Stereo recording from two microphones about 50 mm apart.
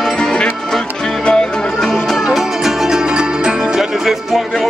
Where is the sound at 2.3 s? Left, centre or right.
Centre.